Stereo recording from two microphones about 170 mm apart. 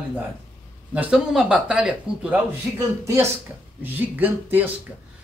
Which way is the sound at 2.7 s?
20° right (ahead or behind).